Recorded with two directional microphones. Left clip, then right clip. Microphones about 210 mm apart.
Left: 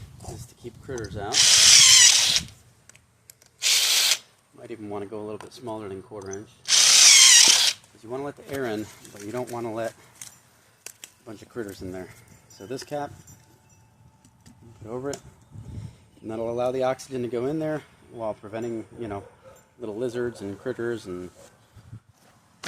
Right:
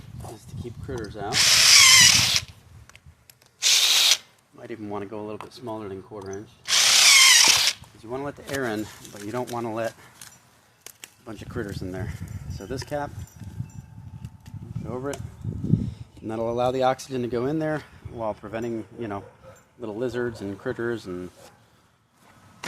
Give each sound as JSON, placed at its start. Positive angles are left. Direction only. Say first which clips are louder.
{"t": 0.2, "sound": "pig", "louder": "right 2 dB", "side_deg": -20}
{"t": 1.3, "sound": "a sound", "louder": "left 1 dB", "side_deg": -5}
{"t": 3.6, "sound": "a sound", "louder": "right 2 dB", "side_deg": -20}
{"t": 4.5, "sound": "speech", "louder": "right 1 dB", "side_deg": -40}
{"t": 6.6, "sound": "drill", "louder": "left 1 dB", "side_deg": -5}
{"t": 8.1, "sound": "speech", "louder": "right 2 dB", "side_deg": -30}
{"t": 11.3, "sound": "speech", "louder": "right 2 dB", "side_deg": -45}
{"t": 14.8, "sound": "speech", "louder": "even", "side_deg": -25}
{"t": 16.2, "sound": "speech", "louder": "right 2 dB", "side_deg": -50}